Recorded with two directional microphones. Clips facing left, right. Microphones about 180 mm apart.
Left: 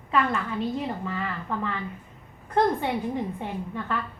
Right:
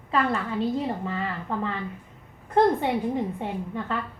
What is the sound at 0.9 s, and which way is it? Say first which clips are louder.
Speech: right 2 dB; 30° right (ahead or behind).